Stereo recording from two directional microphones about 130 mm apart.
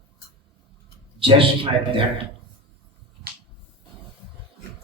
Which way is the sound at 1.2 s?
45° right (ahead or behind).